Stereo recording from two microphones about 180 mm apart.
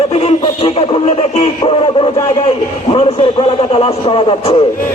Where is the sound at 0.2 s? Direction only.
35° left (ahead or behind).